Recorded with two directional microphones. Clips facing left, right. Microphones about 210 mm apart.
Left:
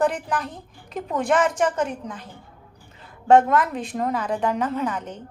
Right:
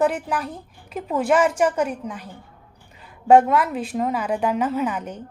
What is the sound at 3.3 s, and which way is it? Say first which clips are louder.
A woman's voice: right 1 dB; 10° right (ahead or behind).